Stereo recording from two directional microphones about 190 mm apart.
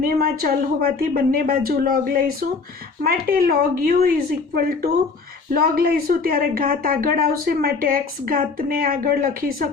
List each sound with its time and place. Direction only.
0.0 s a woman's voice: 50° right (ahead or behind)